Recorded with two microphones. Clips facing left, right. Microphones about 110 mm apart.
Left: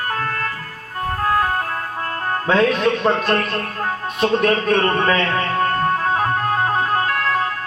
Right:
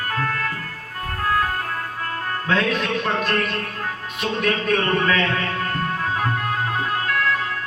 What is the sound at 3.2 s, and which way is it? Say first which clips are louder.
Speech: left 3 dB; 40° left (ahead or behind).